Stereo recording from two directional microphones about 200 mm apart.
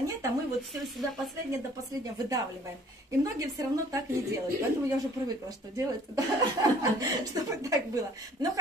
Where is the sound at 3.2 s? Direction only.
15° right (ahead or behind).